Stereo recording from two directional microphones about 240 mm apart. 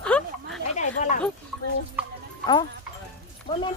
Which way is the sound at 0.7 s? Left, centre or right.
Left.